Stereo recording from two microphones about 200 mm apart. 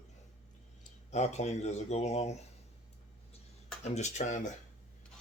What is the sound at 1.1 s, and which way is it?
Speech, 35° left (ahead or behind).